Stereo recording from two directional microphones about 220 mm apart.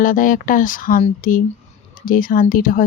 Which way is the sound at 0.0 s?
35° left (ahead or behind).